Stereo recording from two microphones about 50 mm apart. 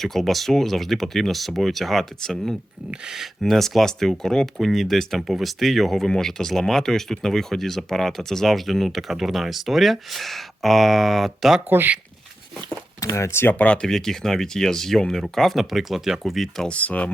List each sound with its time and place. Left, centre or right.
0.0 s speech: centre
3.1 s speech: centre
13.0 s speech: left
13.5 s speech: left
13.8 s speech: centre
16.6 s speech: left